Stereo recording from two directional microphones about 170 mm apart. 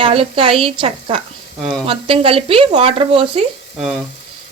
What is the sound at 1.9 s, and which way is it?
Speech, 35° right (ahead or behind).